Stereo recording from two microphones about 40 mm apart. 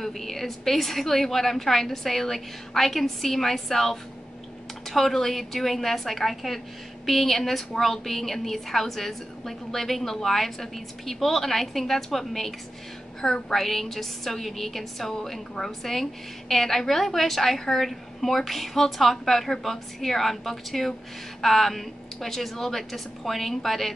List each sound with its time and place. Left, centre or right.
0.0 s a woman's voice: centre